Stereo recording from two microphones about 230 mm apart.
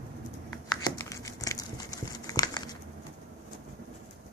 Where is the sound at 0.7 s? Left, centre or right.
Centre.